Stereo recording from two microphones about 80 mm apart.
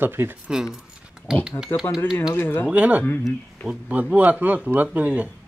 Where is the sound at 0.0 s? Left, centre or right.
Right.